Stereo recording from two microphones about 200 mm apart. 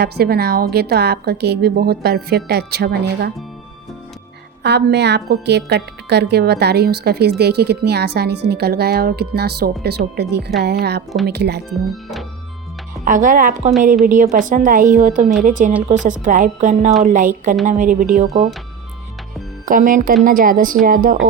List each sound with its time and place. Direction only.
0.0 s a woman's voice: 50° right (ahead or behind)
4.6 s a woman's voice: 55° right (ahead or behind)
13.1 s a woman's voice: 40° right (ahead or behind)
19.6 s a woman's voice: 45° right (ahead or behind)